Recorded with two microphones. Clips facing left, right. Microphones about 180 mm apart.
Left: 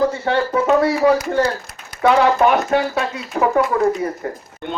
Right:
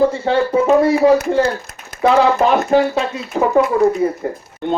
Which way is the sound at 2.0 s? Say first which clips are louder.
Right 1 dB; 25° right (ahead or behind).